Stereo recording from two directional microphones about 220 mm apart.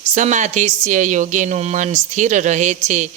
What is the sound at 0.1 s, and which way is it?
Speech, 30° right (ahead or behind).